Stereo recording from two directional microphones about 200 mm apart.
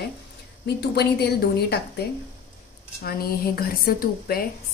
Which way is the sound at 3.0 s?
50° left (ahead or behind).